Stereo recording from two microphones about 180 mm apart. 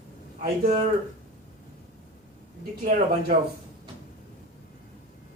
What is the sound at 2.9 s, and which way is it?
Speech, 55° right (ahead or behind).